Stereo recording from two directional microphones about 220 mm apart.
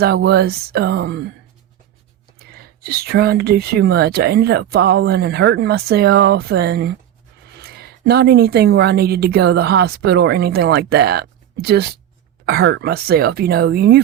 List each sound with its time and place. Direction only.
0.0 s speech: 45° right (ahead or behind)
2.6 s speech: 45° right (ahead or behind)